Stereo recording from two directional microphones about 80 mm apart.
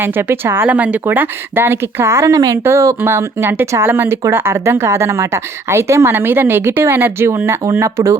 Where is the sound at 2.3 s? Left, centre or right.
Right.